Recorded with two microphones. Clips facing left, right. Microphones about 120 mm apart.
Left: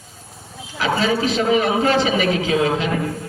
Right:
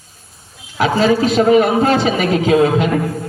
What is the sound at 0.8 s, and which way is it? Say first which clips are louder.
A man's voice: right 6 dB; 45° right (ahead or behind).